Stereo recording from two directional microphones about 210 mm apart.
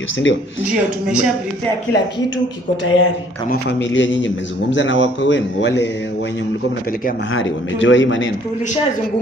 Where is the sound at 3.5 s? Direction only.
55° left (ahead or behind).